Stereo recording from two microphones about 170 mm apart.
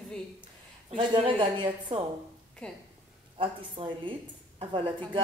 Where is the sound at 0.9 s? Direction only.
30° right (ahead or behind).